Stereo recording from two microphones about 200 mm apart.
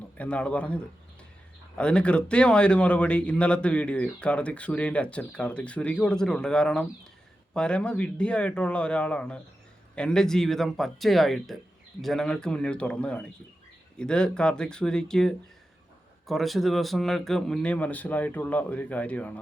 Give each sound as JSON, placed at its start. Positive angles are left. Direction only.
{"t": 0.2, "sound": "a man's voice", "side_deg": 5}